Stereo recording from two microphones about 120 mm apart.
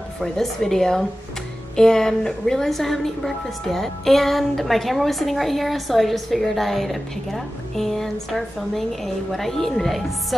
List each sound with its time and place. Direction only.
0.2 s a woman's voice: 5° left (ahead or behind)